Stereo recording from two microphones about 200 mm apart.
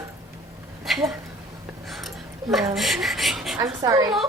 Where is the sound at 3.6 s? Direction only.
15° right (ahead or behind).